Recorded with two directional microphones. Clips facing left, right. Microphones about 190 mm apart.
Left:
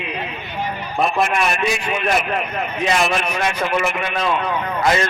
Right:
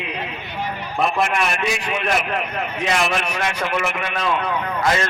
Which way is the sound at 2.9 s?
70° right (ahead or behind).